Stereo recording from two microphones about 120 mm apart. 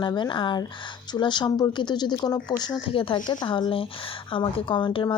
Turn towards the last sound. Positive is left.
turn(degrees=40)  # may be behind; listen again after turning